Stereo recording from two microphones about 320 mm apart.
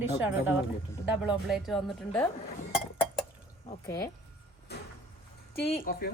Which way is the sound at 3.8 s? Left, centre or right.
Centre.